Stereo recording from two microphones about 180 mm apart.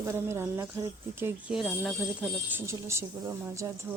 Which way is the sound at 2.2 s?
10° right (ahead or behind).